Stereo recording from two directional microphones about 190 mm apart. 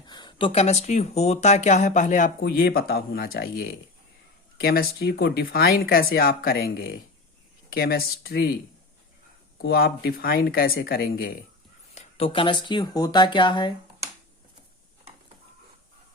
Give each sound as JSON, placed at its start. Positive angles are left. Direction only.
{"t": 0.0, "sound": "speech", "side_deg": 25}
{"t": 2.4, "sound": "speech", "side_deg": 55}
{"t": 9.6, "sound": "speech", "side_deg": 55}
{"t": 11.9, "sound": "speech", "side_deg": 30}